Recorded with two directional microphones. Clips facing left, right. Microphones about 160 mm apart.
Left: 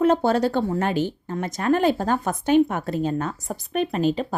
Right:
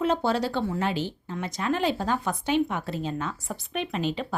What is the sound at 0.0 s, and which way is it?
A woman's voice, 50° left (ahead or behind).